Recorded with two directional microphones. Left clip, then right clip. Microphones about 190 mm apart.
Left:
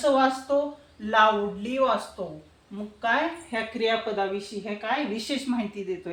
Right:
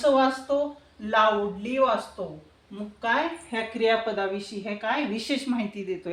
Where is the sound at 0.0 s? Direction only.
15° right (ahead or behind).